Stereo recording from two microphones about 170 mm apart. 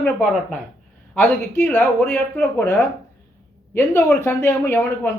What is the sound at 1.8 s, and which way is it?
A man's voice, 5° left (ahead or behind).